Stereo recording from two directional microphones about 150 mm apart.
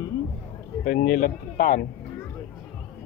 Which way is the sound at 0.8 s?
80° left.